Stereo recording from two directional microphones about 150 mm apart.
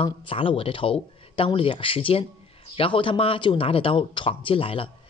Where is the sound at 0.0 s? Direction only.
35° left (ahead or behind).